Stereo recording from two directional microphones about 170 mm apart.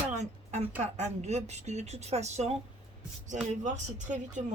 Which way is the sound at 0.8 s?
40° right (ahead or behind).